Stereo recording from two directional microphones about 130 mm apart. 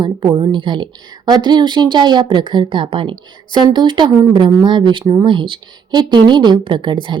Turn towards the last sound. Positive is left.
turn(degrees=-40)  # may be behind; listen again after turning